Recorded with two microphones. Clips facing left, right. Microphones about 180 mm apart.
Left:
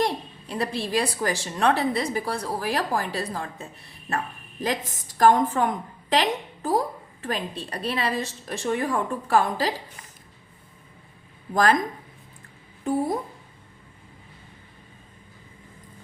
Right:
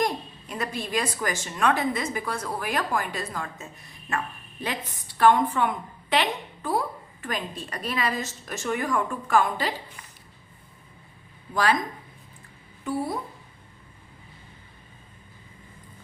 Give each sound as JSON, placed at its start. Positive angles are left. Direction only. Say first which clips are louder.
{"t": 0.0, "sound": "a woman's voice", "louder": "left 1 dB", "side_deg": 30}
{"t": 11.5, "sound": "speech", "louder": "left 3 dB", "side_deg": 45}
{"t": 12.8, "sound": "speech", "louder": "left 4 dB", "side_deg": 45}